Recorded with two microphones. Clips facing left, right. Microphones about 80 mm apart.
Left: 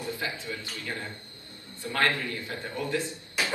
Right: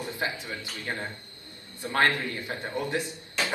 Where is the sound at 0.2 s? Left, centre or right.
Right.